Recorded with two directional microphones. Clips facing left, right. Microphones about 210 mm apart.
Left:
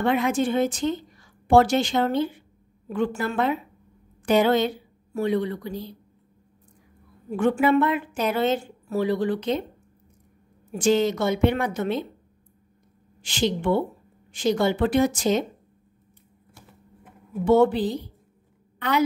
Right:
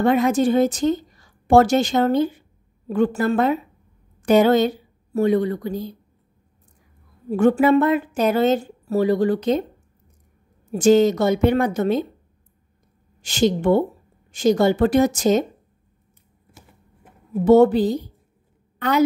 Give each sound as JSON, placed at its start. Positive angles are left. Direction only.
{"t": 0.0, "sound": "a woman's voice", "side_deg": -40}
{"t": 7.2, "sound": "a woman's voice", "side_deg": -40}
{"t": 10.7, "sound": "a woman's voice", "side_deg": -40}
{"t": 13.2, "sound": "a woman's voice", "side_deg": -45}
{"t": 17.5, "sound": "a woman's voice", "side_deg": -40}